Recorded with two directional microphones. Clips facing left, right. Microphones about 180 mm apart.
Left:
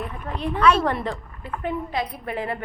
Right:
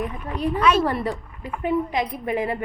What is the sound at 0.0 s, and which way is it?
A woman's voice, 10° right (ahead or behind).